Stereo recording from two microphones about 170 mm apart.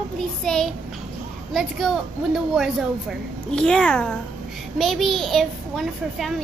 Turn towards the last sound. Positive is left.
turn(degrees=0)  # may be behind; listen again after turning